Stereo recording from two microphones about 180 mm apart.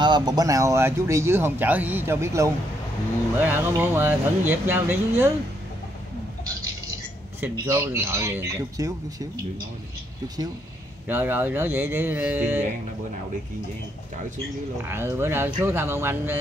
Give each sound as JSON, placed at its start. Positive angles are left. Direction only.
{"t": 0.0, "sound": "speech", "side_deg": -25}
{"t": 7.6, "sound": "speech", "side_deg": -15}
{"t": 14.9, "sound": "speech", "side_deg": -15}